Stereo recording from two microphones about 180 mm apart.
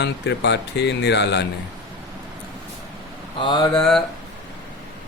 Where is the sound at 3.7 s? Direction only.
5° left (ahead or behind).